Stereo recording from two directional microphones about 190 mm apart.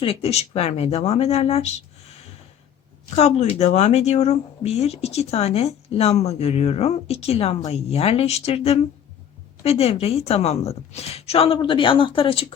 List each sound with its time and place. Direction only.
0.0 s speech: 30° left (ahead or behind)
3.2 s speech: 30° left (ahead or behind)